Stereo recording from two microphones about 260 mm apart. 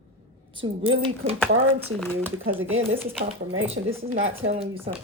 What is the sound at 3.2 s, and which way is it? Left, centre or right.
Speech, right.